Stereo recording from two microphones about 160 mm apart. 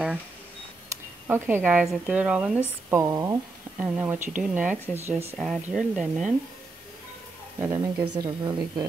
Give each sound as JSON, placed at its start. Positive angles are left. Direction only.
{"t": 1.2, "sound": "speech", "side_deg": -15}
{"t": 2.9, "sound": "speech", "side_deg": -20}
{"t": 5.4, "sound": "speech", "side_deg": 0}
{"t": 7.6, "sound": "speech", "side_deg": -15}
{"t": 8.2, "sound": "a woman's voice", "side_deg": -25}